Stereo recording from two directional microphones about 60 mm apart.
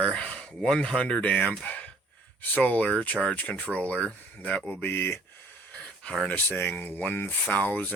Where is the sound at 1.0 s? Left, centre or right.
Left.